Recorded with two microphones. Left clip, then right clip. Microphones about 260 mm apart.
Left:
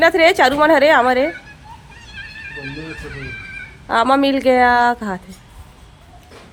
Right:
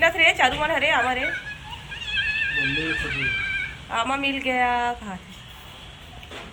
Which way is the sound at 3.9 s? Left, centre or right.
Left.